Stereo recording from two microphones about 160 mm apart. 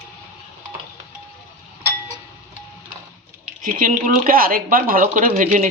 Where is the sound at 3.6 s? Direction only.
55° right (ahead or behind).